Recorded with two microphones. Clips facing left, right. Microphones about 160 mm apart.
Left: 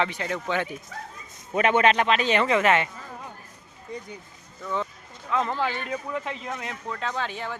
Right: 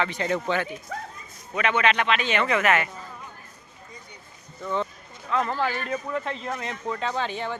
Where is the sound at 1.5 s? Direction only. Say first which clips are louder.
Left 3 dB; 45° left (ahead or behind); by 2.9 s 30° left (ahead or behind).